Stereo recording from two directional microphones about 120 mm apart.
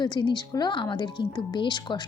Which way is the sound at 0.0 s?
40° left (ahead or behind).